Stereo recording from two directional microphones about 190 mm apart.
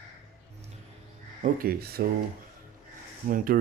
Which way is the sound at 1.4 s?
50° right (ahead or behind).